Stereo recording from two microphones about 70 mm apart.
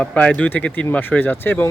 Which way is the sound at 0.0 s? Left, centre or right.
Left.